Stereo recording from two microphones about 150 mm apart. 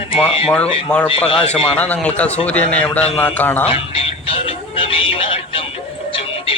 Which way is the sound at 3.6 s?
40° left (ahead or behind).